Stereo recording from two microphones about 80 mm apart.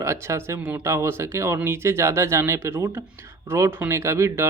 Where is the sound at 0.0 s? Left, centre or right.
Right.